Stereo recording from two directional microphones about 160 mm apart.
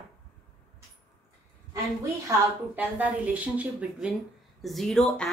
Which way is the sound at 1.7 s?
20° right (ahead or behind).